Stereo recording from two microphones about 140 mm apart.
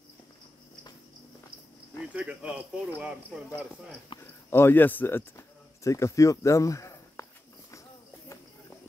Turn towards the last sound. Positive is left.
turn(degrees=20)  # may be behind; listen again after turning